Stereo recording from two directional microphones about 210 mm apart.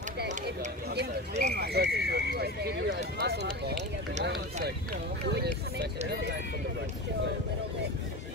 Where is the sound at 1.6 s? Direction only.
50° right (ahead or behind).